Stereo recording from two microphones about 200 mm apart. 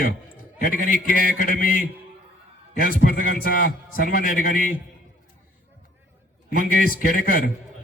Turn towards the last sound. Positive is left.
turn(degrees=45)  # may be behind; listen again after turning